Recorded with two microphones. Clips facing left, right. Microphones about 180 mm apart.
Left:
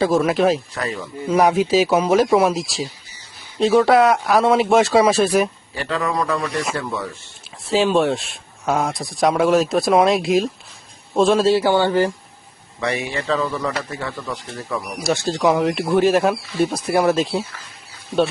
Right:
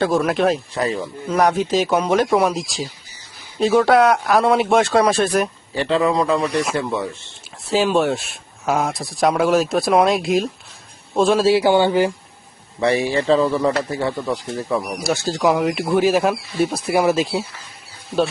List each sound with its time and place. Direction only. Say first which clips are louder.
0.0 s speech: left 1 dB; centre (ahead or behind)
0.7 s speech: right 4 dB; 30° right (ahead or behind)
1.3 s speech: left 2 dB; 5° left (ahead or behind)
5.7 s speech: right 6 dB; 25° right (ahead or behind)
6.4 s speech: right 3 dB; centre (ahead or behind)
6.7 s speech: right 4 dB; 20° right (ahead or behind)
7.6 s a man's voice: even; centre (ahead or behind)
11.5 s speech: right 1 dB; 15° right (ahead or behind)
12.8 s speech: right 6 dB; 30° right (ahead or behind)
15.0 s speech: left 2 dB; centre (ahead or behind)